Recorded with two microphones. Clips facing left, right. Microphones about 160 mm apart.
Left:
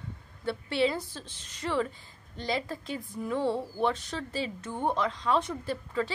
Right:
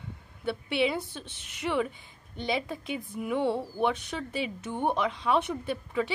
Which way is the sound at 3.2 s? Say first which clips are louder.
Right 1 dB; 15° right (ahead or behind).